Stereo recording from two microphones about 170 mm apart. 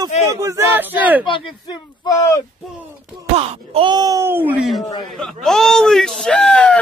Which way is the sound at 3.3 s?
35° right (ahead or behind).